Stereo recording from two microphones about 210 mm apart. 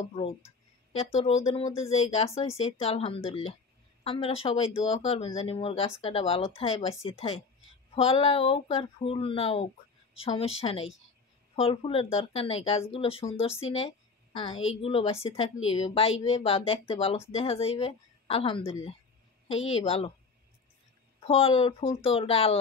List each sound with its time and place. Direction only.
0.9 s speech: 30° left (ahead or behind)
21.2 s speech: 25° left (ahead or behind)